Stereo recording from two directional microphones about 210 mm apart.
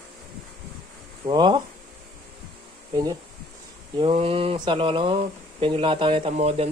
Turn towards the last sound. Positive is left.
turn(degrees=-30)  # may be behind; listen again after turning